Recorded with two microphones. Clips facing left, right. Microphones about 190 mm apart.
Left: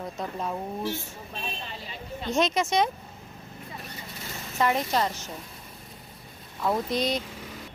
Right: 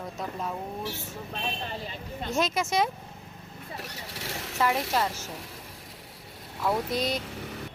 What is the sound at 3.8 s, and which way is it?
Vehicle, 85° right.